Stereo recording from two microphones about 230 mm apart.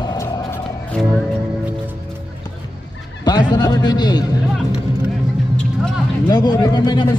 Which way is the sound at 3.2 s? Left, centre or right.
Centre.